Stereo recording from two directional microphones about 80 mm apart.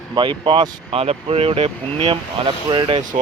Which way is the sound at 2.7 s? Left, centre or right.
Right.